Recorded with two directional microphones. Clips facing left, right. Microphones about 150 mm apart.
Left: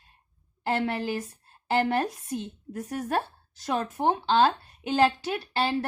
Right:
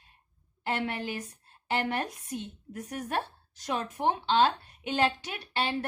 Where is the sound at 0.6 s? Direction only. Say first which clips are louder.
Left 5 dB; 40° left (ahead or behind).